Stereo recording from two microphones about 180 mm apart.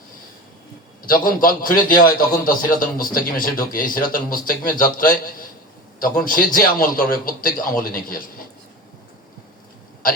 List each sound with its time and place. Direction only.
1.0 s speech: 50° left (ahead or behind)